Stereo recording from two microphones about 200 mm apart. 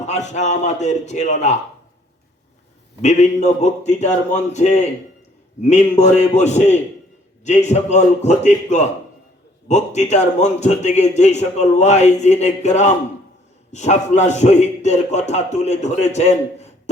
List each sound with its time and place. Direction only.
0.0 s a man's voice: 35° left (ahead or behind)
3.0 s a man's voice: 35° left (ahead or behind)